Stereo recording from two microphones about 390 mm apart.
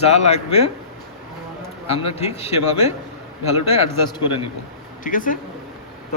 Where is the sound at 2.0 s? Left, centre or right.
Centre.